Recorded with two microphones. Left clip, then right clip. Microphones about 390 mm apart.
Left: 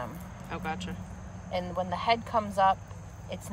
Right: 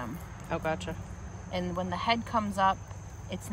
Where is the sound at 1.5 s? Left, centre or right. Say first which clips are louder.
Left 2 dB; centre.